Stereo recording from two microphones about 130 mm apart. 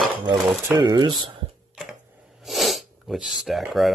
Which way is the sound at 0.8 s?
35° right (ahead or behind).